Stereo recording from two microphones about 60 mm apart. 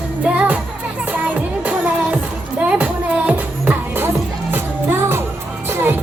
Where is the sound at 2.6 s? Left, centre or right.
Centre.